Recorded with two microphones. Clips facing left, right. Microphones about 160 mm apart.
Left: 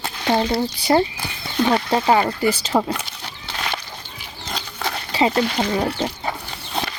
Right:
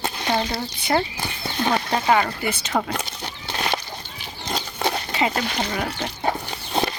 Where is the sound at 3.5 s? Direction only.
25° right (ahead or behind).